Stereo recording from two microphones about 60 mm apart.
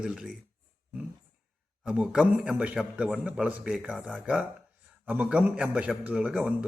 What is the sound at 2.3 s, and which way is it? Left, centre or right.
Speech, right.